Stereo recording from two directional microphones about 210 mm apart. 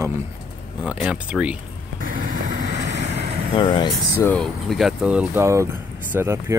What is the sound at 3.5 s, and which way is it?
Speech, 20° left (ahead or behind).